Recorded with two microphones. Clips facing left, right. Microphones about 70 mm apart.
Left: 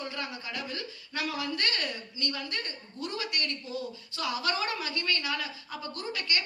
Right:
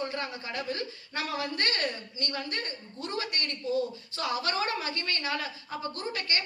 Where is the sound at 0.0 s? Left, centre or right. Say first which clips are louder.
Right 3 dB; right.